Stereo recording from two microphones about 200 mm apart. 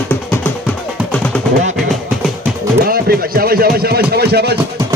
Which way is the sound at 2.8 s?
50° right (ahead or behind).